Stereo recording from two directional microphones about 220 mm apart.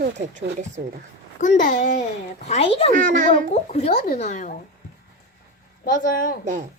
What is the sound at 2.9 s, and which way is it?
Speech, 35° right (ahead or behind).